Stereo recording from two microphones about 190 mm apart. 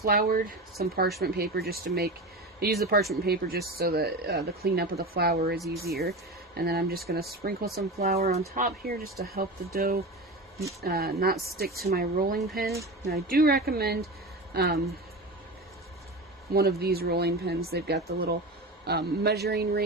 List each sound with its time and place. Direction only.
0.0 s speech: 50° right (ahead or behind)
8.3 s speech: 35° right (ahead or behind)
8.6 s speech: 50° right (ahead or behind)
16.6 s speech: 55° right (ahead or behind)